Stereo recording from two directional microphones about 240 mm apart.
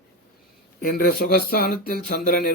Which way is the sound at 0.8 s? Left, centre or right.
Left.